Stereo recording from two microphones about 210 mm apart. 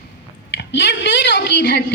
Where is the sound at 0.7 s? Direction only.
55° left (ahead or behind).